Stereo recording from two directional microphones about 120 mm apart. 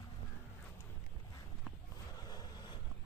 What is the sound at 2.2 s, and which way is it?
Vehicle, 35° left (ahead or behind).